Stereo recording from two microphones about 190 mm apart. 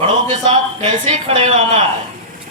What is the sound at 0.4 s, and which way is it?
A woman's voice, 30° right (ahead or behind).